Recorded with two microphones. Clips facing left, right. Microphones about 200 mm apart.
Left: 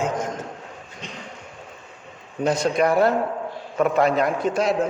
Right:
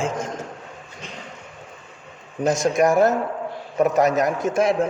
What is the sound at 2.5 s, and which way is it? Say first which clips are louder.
A man's voice: right 2 dB; 45° right (ahead or behind).